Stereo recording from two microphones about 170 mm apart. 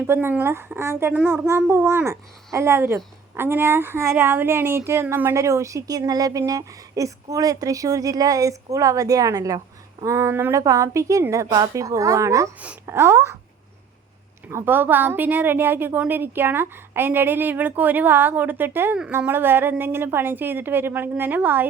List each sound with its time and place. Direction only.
0.0 s a woman's voice: 10° right (ahead or behind)
14.5 s speech: 10° right (ahead or behind)